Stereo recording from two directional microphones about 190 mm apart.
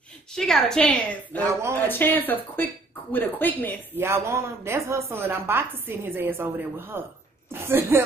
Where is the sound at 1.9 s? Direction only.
10° left (ahead or behind).